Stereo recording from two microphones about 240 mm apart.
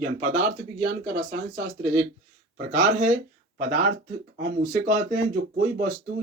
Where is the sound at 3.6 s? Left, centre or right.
Right.